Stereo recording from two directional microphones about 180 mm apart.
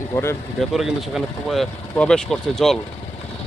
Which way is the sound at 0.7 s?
Centre (ahead or behind).